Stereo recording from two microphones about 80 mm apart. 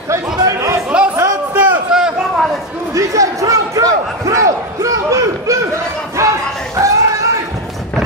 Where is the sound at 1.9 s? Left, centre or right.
Centre.